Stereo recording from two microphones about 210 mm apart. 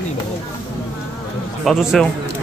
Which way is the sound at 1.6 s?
Centre (ahead or behind).